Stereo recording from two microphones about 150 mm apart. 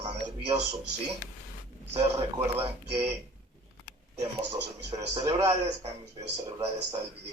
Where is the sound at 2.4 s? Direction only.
15° right (ahead or behind).